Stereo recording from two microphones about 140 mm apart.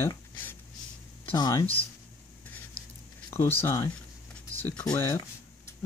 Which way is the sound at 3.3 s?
15° left (ahead or behind).